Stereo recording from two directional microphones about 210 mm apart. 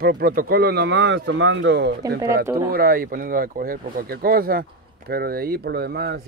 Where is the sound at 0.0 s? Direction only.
45° right (ahead or behind).